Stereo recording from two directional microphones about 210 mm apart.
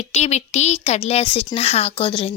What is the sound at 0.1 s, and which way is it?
A woman's voice, 30° left (ahead or behind).